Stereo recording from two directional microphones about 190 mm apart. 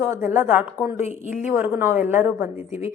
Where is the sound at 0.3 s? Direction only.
10° right (ahead or behind).